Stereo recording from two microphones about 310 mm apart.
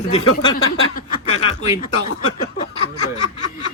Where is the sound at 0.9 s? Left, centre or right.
Left.